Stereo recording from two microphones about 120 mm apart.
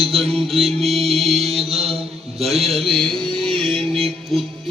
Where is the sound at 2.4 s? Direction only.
Centre (ahead or behind).